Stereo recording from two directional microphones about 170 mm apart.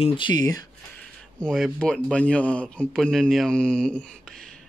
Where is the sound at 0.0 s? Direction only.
25° left (ahead or behind).